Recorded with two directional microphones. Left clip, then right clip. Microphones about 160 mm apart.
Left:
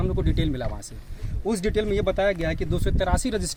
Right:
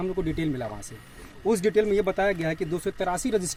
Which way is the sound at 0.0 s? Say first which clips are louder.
Even; 10° left (ahead or behind).